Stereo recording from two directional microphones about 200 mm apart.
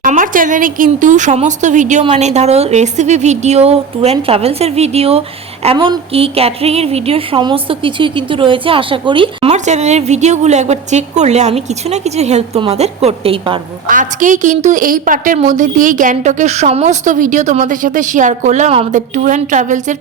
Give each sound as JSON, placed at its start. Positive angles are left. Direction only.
{"t": 0.0, "sound": "a woman's voice", "side_deg": -40}
{"t": 13.8, "sound": "a woman's voice", "side_deg": -40}